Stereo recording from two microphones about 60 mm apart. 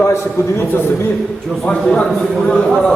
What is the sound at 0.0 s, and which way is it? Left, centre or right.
Speech, left.